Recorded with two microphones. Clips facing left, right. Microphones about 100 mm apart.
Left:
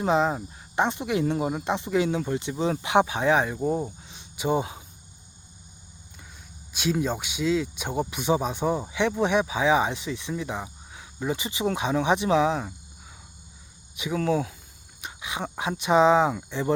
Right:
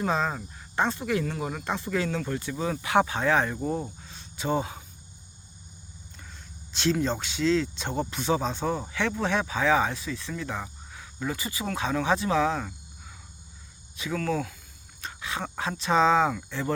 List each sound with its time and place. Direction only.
0.0 s speech: 20° left (ahead or behind)
4.0 s a sound: 15° left (ahead or behind)
6.7 s speech: 10° left (ahead or behind)
13.9 s speech: 15° left (ahead or behind)
15.0 s wild animals: 15° left (ahead or behind)
15.8 s speech: 15° left (ahead or behind)